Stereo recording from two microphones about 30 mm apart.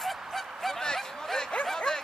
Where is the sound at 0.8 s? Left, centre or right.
Centre.